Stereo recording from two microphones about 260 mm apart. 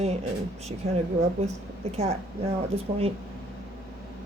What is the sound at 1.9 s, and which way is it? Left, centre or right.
Speech, right.